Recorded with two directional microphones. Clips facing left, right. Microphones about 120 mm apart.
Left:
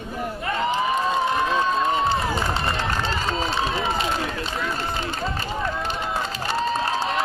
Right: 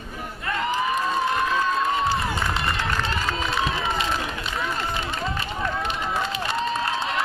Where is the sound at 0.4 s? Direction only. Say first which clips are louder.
Left 1 dB; 30° left (ahead or behind).